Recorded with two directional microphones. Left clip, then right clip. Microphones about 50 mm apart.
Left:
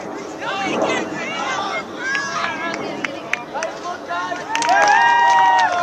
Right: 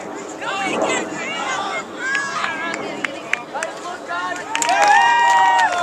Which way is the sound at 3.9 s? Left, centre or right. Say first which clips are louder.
Left 1 dB; centre.